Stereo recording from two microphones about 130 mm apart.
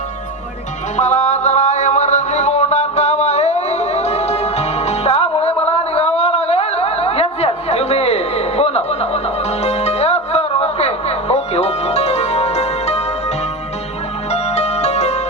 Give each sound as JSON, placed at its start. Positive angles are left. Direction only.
{"t": 0.9, "sound": "music", "side_deg": 65}
{"t": 14.3, "sound": "music", "side_deg": 55}